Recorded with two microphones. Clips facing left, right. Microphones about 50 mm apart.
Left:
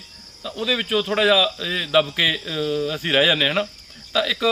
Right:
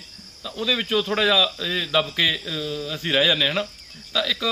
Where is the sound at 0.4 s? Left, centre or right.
Centre.